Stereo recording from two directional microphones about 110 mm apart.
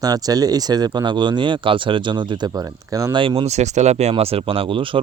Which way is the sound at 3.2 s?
55° right (ahead or behind).